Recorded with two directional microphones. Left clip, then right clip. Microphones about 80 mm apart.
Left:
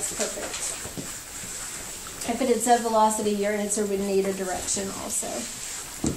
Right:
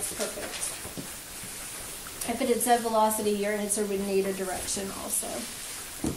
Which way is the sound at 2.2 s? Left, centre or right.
Right.